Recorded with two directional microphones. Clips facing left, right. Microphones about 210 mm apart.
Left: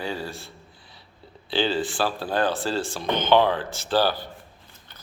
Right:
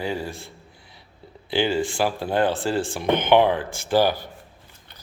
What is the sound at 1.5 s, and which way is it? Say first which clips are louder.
Speech: right 2 dB; 15° right (ahead or behind).